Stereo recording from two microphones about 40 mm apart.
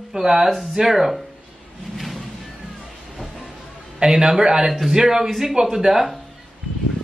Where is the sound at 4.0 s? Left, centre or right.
Centre.